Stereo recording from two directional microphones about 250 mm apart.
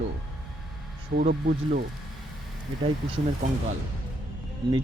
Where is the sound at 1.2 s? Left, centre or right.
Right.